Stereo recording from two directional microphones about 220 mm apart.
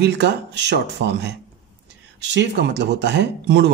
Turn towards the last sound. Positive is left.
turn(degrees=-50)  # may be behind; listen again after turning